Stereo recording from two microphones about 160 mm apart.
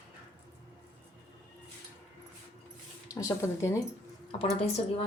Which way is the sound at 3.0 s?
20° left (ahead or behind).